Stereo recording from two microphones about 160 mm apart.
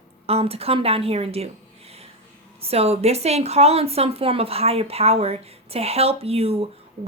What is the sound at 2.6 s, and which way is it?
Speech, 40° right (ahead or behind).